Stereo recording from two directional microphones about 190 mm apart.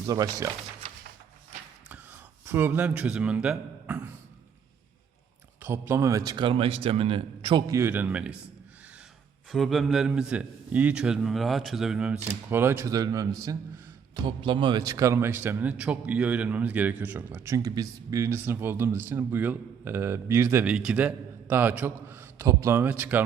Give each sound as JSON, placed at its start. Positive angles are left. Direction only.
{"t": 0.0, "sound": "a man's voice", "side_deg": -20}
{"t": 2.5, "sound": "a man's voice", "side_deg": -10}
{"t": 5.6, "sound": "a man's voice", "side_deg": -10}
{"t": 7.8, "sound": "a man's voice", "side_deg": -10}
{"t": 9.5, "sound": "a man's voice", "side_deg": 0}